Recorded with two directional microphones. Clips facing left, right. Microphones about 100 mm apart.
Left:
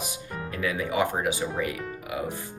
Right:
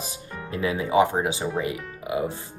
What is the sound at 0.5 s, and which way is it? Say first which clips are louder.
Speech: right 6 dB; 25° right (ahead or behind).